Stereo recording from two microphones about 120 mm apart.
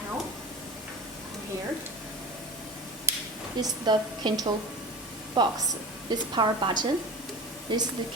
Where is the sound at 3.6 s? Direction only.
35° right (ahead or behind).